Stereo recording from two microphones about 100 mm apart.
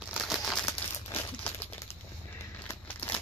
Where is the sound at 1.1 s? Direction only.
20° left (ahead or behind).